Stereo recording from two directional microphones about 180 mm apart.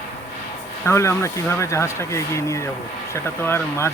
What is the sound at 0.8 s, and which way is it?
A man's voice, 15° left (ahead or behind).